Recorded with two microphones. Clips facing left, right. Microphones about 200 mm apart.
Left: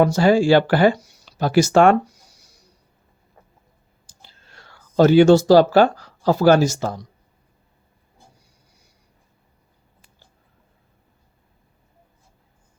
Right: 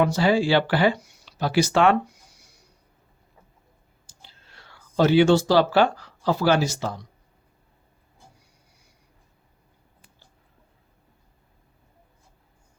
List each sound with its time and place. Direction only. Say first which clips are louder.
0.0 s speech: left 5 dB; 45° left (ahead or behind)
4.2 s speech: left 2 dB; 45° left (ahead or behind)